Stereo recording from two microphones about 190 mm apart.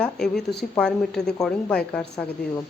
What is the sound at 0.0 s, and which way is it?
Speech, 5° left (ahead or behind).